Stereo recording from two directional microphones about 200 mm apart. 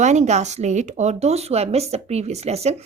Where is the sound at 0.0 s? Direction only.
35° right (ahead or behind).